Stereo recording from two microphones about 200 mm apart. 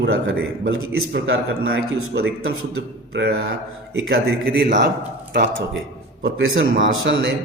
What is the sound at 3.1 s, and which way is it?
Speech, 65° right (ahead or behind).